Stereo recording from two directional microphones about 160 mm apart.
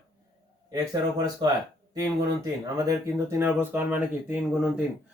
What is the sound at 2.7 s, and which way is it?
Speech, 20° right (ahead or behind).